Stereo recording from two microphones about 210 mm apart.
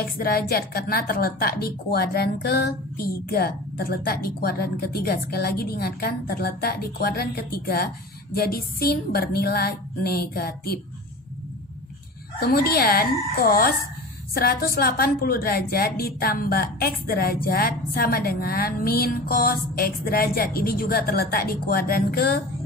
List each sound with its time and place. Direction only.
0.0 s a woman's voice: 45° left (ahead or behind)
12.4 s a woman's voice: 45° left (ahead or behind)